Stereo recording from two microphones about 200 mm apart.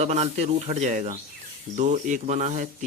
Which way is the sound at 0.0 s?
35° right (ahead or behind).